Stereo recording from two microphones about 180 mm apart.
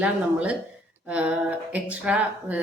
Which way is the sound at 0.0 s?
5° right (ahead or behind).